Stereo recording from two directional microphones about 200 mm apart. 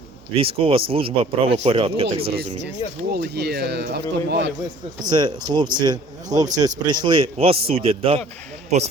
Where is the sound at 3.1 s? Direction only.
55° right (ahead or behind).